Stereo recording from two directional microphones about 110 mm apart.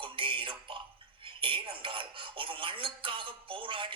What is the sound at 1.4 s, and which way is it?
Speech, 50° right (ahead or behind).